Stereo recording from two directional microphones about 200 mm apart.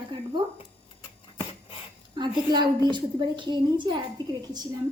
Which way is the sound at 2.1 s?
20° right (ahead or behind).